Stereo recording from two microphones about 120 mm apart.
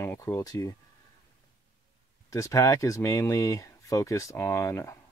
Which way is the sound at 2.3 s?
25° left (ahead or behind).